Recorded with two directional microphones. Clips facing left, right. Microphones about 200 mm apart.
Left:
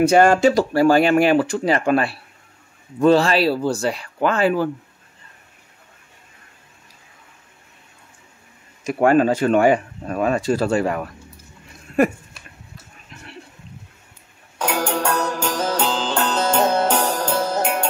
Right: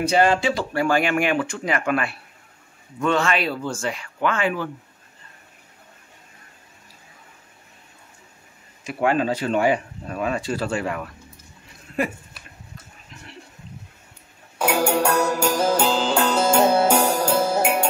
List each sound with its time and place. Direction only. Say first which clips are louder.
0.0 s speech: left 6 dB; 50° left (ahead or behind)
8.8 s speech: left 6 dB; 45° left (ahead or behind)
14.6 s music: right 2 dB; 10° right (ahead or behind)